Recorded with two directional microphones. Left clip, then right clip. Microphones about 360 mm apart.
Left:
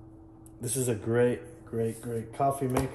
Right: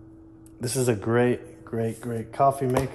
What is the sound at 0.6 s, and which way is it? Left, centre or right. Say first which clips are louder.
Speech: right 6 dB; centre.